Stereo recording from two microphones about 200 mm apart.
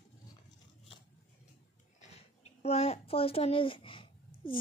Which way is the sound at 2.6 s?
30° left (ahead or behind).